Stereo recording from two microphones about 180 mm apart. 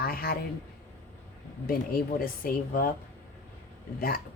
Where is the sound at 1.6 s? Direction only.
55° left (ahead or behind).